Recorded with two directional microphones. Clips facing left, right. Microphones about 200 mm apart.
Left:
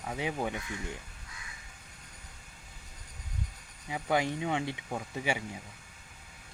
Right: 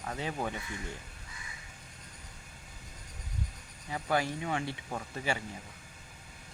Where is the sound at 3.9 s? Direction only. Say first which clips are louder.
Left 2 dB; 20° left (ahead or behind).